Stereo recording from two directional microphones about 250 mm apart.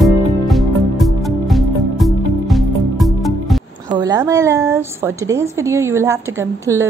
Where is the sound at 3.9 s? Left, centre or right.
Centre.